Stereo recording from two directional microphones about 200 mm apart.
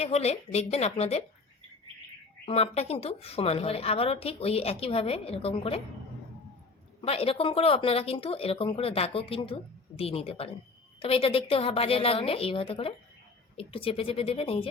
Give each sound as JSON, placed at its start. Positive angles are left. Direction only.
{"t": 0.0, "sound": "a woman's voice", "side_deg": 30}
{"t": 2.5, "sound": "a woman's voice", "side_deg": 30}
{"t": 7.0, "sound": "a woman's voice", "side_deg": 30}